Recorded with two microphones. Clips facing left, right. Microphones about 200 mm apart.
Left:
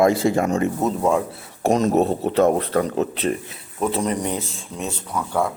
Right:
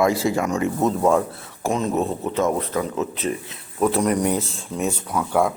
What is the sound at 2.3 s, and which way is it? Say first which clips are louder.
Speech: left 4 dB; 65° left (ahead or behind).